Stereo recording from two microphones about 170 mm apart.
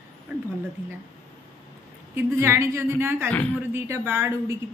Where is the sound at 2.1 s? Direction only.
15° right (ahead or behind).